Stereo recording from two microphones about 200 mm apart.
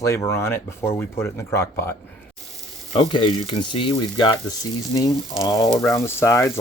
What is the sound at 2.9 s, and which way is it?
Speech, 25° left (ahead or behind).